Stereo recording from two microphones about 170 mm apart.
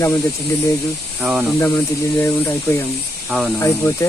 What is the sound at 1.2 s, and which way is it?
Speech, 10° right (ahead or behind).